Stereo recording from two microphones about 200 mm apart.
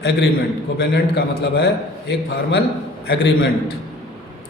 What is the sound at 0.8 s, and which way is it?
Speech, 55° left (ahead or behind).